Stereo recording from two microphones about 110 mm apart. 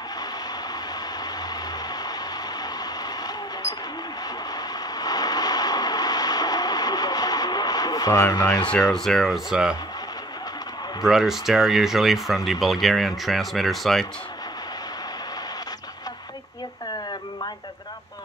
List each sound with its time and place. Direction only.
4.9 s vehicle: 35° left (ahead or behind)
8.6 s speech: 5° left (ahead or behind)
11.0 s speech: 5° right (ahead or behind)